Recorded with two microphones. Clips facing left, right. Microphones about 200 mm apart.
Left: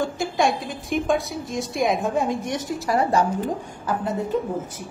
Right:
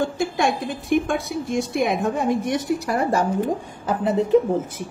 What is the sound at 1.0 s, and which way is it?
Speech, 60° right (ahead or behind).